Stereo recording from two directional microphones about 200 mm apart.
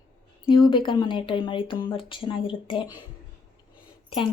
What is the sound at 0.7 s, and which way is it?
A woman's voice, 25° left (ahead or behind).